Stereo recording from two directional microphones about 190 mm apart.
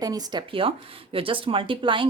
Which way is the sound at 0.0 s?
20° right (ahead or behind).